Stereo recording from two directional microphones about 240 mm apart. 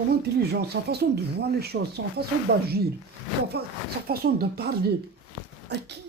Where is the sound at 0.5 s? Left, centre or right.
Right.